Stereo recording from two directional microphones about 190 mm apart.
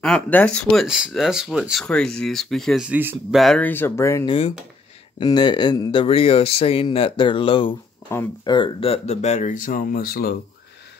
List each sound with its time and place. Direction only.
0.0 s speech: 5° left (ahead or behind)
3.3 s speech: 5° left (ahead or behind); by 7.7 s 25° left (ahead or behind)
8.1 s speech: 10° left (ahead or behind)
8.5 s speech: 25° left (ahead or behind); by 10.3 s 50° left (ahead or behind)